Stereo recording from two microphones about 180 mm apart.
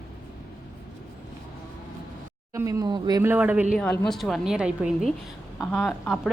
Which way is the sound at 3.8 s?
5° left (ahead or behind).